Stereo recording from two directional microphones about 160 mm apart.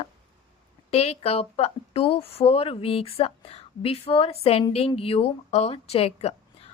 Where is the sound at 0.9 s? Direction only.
40° left (ahead or behind).